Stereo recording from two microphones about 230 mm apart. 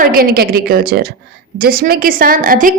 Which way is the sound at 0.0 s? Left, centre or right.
Right.